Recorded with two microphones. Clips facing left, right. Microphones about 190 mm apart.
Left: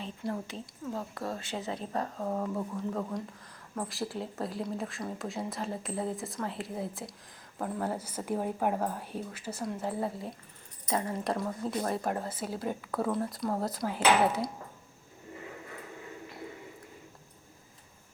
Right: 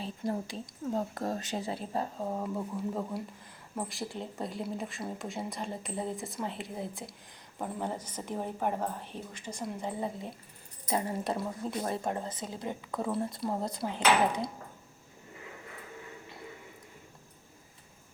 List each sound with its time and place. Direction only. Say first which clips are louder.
0.3 s speech: right 2 dB; 35° right (ahead or behind)
2.3 s speech: left 1 dB; 10° right (ahead or behind)
3.8 s a woman's voice: left 2 dB; centre (ahead or behind)
10.8 s speech: even; 25° right (ahead or behind)
11.2 s speech: left 1 dB; centre (ahead or behind)
11.8 s speech: left 1 dB; 25° right (ahead or behind)
12.3 s a woman's voice: left 3 dB; 5° left (ahead or behind)
12.6 s speech: left 2 dB; 15° right (ahead or behind)
13.1 s speech: even; 5° right (ahead or behind)